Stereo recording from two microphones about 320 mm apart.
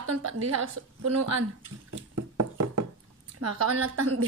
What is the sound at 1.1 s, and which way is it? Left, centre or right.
Speech, right.